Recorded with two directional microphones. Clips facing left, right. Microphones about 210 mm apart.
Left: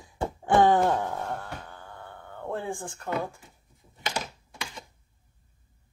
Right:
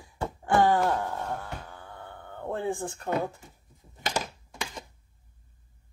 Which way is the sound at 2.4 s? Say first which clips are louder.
Right 2 dB; 20° right (ahead or behind).